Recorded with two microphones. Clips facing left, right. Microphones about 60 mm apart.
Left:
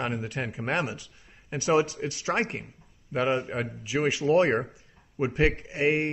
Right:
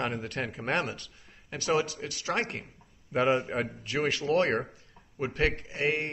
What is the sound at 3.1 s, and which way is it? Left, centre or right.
A man's voice, centre.